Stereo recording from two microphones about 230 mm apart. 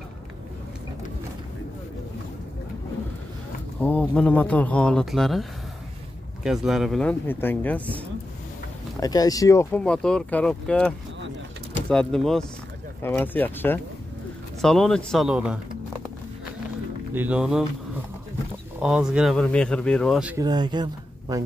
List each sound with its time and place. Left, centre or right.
3.8 s speech: centre
9.0 s speech: centre
17.1 s speech: centre
18.8 s speech: centre
20.4 s speech: centre